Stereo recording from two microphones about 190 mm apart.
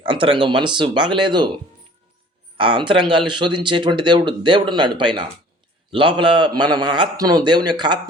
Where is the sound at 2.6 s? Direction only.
25° right (ahead or behind).